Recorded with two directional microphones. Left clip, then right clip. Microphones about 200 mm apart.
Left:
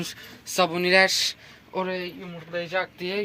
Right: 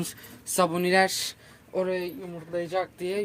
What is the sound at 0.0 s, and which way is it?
Speech, 20° right (ahead or behind).